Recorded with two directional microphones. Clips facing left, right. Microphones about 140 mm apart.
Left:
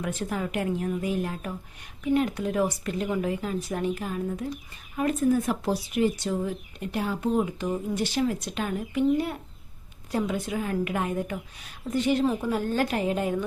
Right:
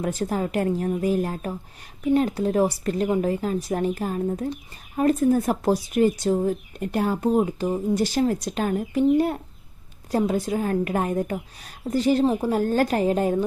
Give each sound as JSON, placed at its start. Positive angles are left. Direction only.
{"t": 0.0, "sound": "speech", "side_deg": -35}
{"t": 12.5, "sound": "speech", "side_deg": -40}